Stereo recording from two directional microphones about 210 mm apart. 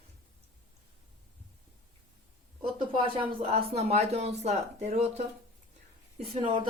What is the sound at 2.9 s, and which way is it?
Speech, 25° right (ahead or behind).